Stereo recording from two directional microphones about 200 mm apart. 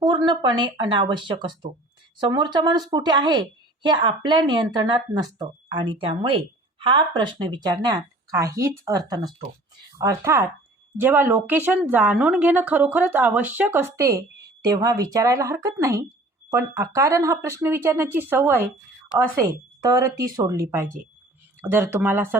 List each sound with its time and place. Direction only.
0.0 s a woman's voice: 20° right (ahead or behind)